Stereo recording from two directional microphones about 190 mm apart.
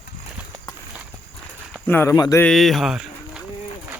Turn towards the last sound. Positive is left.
turn(degrees=0)  # may be behind; listen again after turning